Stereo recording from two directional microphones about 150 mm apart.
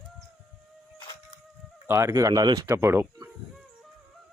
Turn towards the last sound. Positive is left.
turn(degrees=-15)  # may be behind; listen again after turning